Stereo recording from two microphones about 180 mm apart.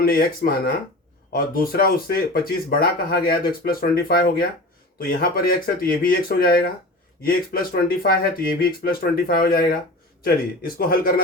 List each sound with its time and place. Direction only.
0.0 s speech: 55° left (ahead or behind)